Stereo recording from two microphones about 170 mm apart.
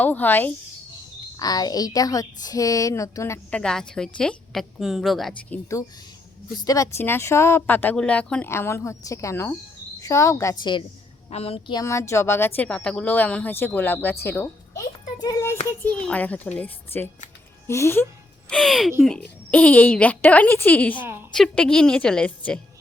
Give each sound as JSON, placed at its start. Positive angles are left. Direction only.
{"t": 0.0, "sound": "a woman's voice", "side_deg": 10}
{"t": 1.4, "sound": "a woman's voice", "side_deg": 25}
{"t": 5.5, "sound": "a woman's voice", "side_deg": 20}
{"t": 11.3, "sound": "a woman's voice", "side_deg": 35}
{"t": 15.8, "sound": "a woman's voice", "side_deg": 5}
{"t": 18.4, "sound": "a woman's voice", "side_deg": 5}
{"t": 21.0, "sound": "a woman's voice", "side_deg": -10}
{"t": 21.3, "sound": "a woman's voice", "side_deg": 5}